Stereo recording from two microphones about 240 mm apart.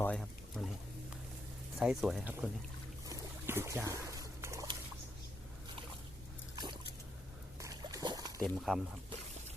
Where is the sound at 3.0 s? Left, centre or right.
Centre.